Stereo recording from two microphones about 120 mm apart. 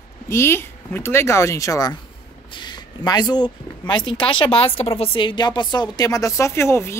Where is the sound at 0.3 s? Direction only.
20° left (ahead or behind).